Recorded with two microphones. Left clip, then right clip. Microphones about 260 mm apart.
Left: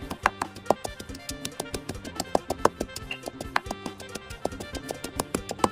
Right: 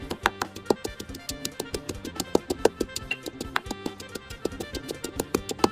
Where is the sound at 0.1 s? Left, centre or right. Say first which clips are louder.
Even; centre.